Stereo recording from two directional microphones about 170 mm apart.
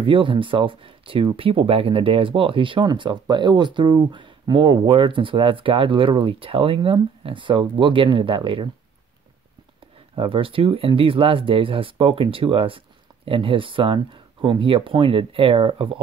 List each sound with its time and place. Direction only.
0.0 s speech: 30° right (ahead or behind)
10.1 s speech: 30° right (ahead or behind)